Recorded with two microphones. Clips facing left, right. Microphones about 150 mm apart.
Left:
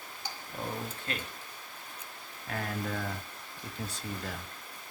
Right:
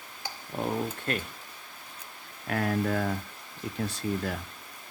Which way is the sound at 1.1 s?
50° right (ahead or behind).